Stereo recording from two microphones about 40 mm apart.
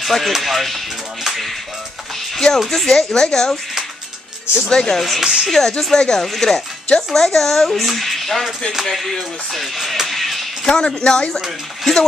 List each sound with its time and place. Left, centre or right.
0.0 s speech: centre
4.6 s speech: centre
5.2 s speech: centre
5.5 s speech: centre
8.9 s music: centre
10.9 s speech: centre